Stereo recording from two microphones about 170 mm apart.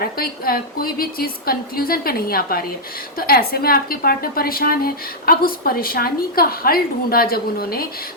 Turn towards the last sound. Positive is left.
turn(degrees=60)  # may be behind; listen again after turning